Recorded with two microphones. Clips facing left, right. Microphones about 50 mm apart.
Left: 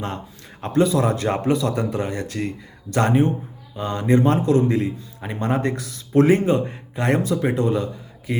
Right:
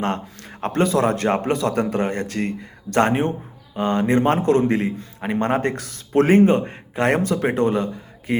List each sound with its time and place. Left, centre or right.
0.0 s a man's voice: right